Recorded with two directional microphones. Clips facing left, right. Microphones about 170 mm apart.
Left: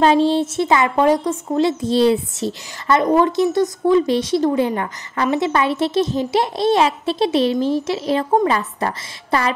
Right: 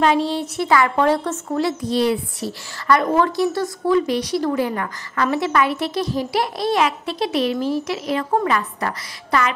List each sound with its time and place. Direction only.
0.0 s a woman's voice: 30° left (ahead or behind)